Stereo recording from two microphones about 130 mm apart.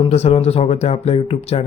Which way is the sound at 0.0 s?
50° left (ahead or behind).